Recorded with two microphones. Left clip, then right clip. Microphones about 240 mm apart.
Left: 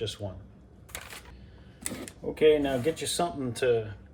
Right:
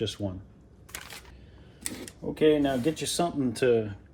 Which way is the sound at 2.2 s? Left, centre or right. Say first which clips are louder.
Even; right.